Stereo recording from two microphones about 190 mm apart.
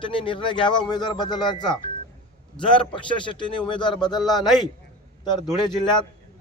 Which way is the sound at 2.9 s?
25° left (ahead or behind).